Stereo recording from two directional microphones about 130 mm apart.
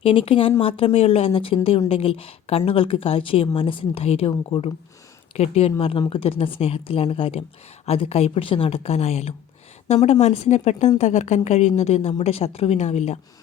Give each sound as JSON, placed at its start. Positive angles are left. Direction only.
{"t": 0.0, "sound": "a woman's voice", "side_deg": 45}